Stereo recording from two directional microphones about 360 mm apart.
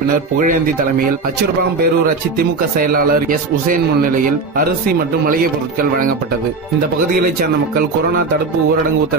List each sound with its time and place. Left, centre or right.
0.4 s a man's voice: right
2.3 s a man's voice: right